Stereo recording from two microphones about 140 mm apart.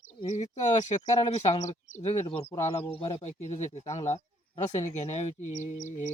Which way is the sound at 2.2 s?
45° left (ahead or behind).